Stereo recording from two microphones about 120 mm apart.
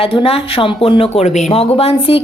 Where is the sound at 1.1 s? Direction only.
75° left (ahead or behind).